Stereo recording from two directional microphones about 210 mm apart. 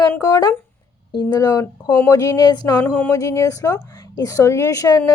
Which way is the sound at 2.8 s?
10° left (ahead or behind).